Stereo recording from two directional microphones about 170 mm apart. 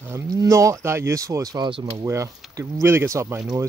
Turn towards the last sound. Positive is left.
turn(degrees=-15)  # may be behind; listen again after turning